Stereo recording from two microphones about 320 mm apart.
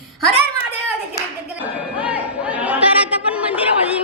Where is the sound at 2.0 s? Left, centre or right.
Centre.